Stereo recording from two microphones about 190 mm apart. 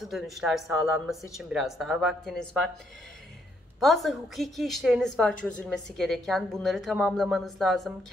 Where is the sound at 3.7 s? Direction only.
Centre (ahead or behind).